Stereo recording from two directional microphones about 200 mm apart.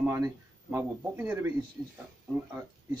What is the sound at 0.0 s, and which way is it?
Speech, 10° right (ahead or behind).